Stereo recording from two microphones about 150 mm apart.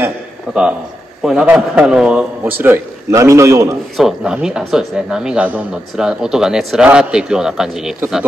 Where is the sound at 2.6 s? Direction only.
15° right (ahead or behind).